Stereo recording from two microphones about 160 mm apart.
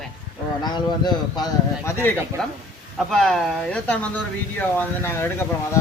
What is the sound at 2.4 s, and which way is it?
Speech, 5° left (ahead or behind).